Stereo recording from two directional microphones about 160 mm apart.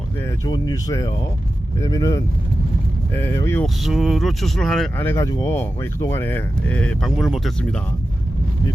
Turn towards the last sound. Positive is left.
turn(degrees=0)  # may be behind; listen again after turning